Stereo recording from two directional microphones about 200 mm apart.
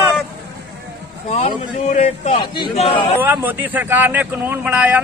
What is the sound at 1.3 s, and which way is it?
A man's voice, 35° left (ahead or behind).